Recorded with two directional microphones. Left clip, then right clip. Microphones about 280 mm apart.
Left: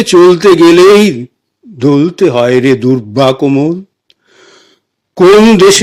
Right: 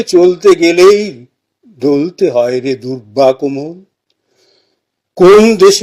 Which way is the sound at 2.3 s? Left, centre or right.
Left.